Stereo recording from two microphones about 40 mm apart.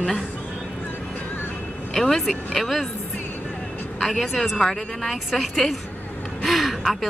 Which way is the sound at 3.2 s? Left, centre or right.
Left.